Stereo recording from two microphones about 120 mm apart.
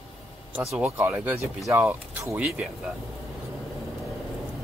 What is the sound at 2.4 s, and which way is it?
Speech, 10° right (ahead or behind).